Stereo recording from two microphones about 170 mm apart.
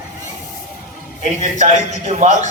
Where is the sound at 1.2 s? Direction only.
45° right (ahead or behind).